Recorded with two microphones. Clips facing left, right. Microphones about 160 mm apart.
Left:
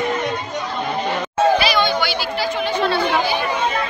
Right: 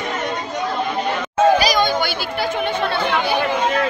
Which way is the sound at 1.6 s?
45° right (ahead or behind).